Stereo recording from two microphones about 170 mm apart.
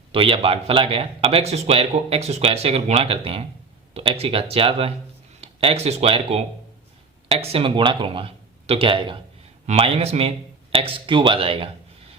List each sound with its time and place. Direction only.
0.1 s a man's voice: 35° right (ahead or behind)